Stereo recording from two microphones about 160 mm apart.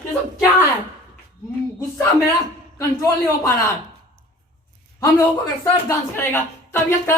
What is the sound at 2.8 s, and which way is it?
Speech, 20° left (ahead or behind).